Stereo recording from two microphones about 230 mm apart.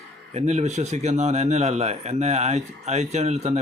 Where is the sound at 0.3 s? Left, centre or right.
Right.